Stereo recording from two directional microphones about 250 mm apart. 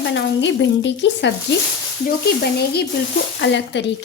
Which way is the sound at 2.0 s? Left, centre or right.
Left.